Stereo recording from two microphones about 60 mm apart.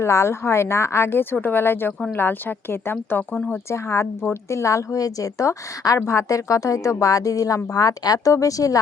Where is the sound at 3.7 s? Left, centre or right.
Left.